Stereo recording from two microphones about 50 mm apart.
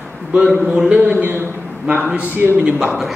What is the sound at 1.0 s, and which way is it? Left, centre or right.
A man's voice, right.